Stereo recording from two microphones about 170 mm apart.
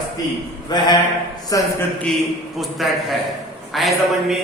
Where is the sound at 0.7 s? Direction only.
25° left (ahead or behind).